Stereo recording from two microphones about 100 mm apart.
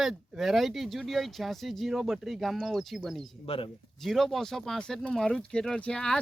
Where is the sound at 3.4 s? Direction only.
65° left (ahead or behind).